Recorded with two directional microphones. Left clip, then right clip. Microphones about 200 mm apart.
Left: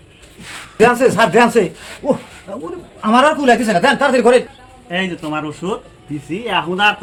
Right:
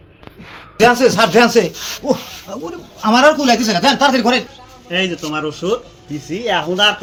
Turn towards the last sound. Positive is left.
turn(degrees=15)  # may be behind; listen again after turning